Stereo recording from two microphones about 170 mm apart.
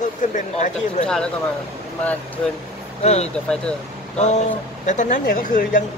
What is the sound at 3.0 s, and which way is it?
Speech, 40° left (ahead or behind).